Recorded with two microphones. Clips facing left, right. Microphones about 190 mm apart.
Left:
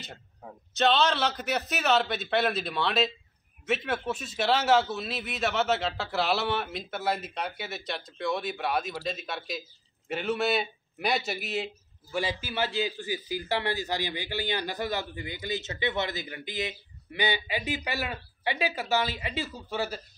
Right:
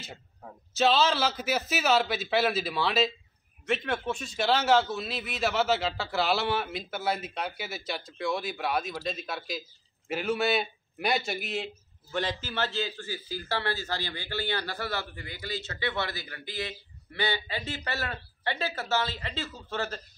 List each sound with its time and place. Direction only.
0.0 s a man's voice: centre (ahead or behind)